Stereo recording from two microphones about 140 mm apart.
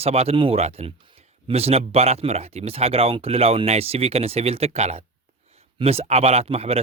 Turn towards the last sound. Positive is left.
turn(degrees=-45)  # may be behind; listen again after turning